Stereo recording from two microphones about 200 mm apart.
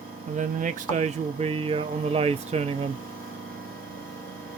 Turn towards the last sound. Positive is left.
turn(degrees=-30)  # may be behind; listen again after turning